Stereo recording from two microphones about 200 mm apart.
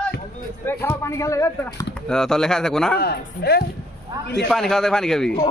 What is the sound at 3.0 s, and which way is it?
Speech, 50° left (ahead or behind).